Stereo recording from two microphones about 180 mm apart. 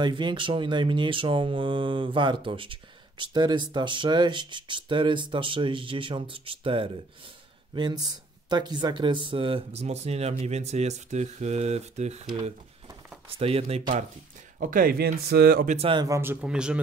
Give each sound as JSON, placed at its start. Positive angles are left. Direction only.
{"t": 0.0, "sound": "speech", "side_deg": -25}
{"t": 13.3, "sound": "speech", "side_deg": -35}
{"t": 14.6, "sound": "speech", "side_deg": -50}
{"t": 15.7, "sound": "speech", "side_deg": -30}
{"t": 16.2, "sound": "speech", "side_deg": -10}